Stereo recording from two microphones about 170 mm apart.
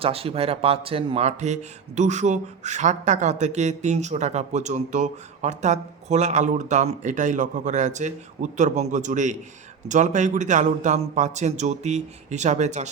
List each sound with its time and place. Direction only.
0.0 s speech: 35° right (ahead or behind)